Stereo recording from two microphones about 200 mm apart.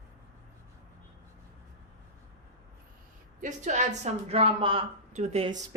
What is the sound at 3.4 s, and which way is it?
A woman's voice, 35° right (ahead or behind).